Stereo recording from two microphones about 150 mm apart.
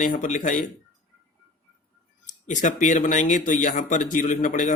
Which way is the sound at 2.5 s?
55° left (ahead or behind).